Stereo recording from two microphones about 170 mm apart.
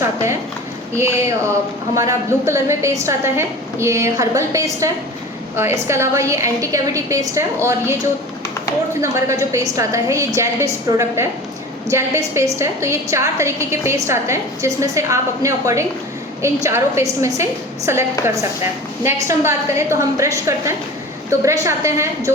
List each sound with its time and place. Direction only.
0.0 s a woman's voice: 15° right (ahead or behind)
9.0 s a woman's voice: 15° right (ahead or behind)